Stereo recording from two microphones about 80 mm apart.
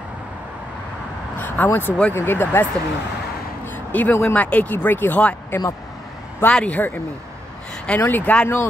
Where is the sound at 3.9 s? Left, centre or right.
Left.